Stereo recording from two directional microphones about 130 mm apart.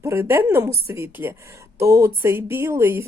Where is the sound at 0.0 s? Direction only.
20° right (ahead or behind).